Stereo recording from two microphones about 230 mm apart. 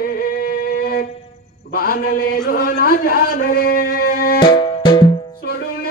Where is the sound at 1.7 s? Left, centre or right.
Left.